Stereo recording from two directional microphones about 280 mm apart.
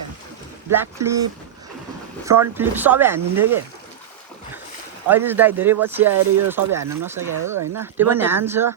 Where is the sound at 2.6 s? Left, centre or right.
Centre.